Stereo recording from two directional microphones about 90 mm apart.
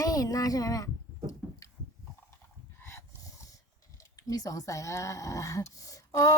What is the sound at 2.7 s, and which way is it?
Dog, 35° left (ahead or behind).